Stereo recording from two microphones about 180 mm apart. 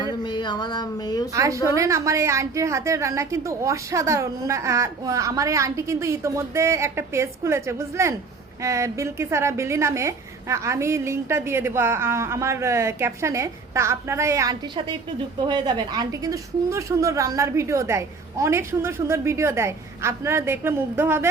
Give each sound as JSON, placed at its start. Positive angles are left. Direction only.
{"t": 0.0, "sound": "speech", "side_deg": 25}
{"t": 1.3, "sound": "a woman's voice", "side_deg": -15}